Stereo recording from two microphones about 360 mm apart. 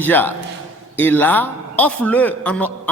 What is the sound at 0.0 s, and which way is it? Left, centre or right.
A man's voice, centre.